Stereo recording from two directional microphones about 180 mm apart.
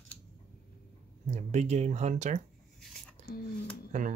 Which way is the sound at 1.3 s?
40° right (ahead or behind).